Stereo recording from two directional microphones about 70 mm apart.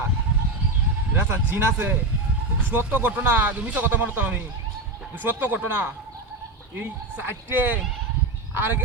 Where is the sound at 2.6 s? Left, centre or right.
Right.